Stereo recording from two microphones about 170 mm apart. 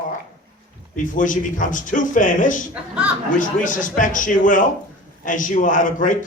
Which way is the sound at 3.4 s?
50° left (ahead or behind).